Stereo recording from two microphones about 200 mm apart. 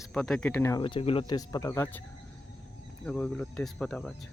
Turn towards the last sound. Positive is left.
turn(degrees=5)  # may be behind; listen again after turning